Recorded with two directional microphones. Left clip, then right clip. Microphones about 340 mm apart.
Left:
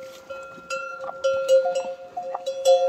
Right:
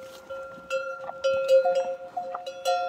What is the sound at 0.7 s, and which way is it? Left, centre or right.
Cowbell, left.